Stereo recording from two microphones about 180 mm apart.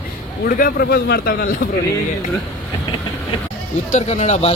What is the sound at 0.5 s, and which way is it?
A man's voice, 55° left (ahead or behind).